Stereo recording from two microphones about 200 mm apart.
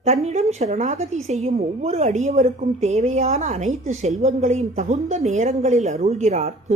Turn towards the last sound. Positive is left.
turn(degrees=-35)  # may be behind; listen again after turning